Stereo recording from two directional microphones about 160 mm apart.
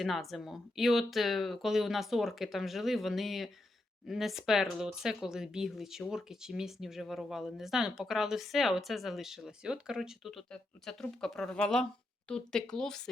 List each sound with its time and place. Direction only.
0.0 s speech: centre (ahead or behind)